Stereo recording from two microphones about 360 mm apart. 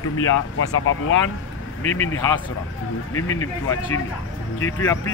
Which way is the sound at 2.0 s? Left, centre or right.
Centre.